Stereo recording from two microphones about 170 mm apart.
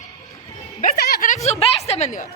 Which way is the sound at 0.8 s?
70° left (ahead or behind).